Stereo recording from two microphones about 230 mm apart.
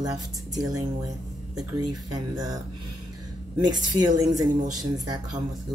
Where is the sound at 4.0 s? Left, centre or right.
Centre.